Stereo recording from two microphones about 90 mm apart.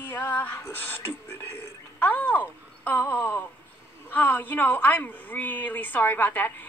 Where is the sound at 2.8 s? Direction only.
20° left (ahead or behind).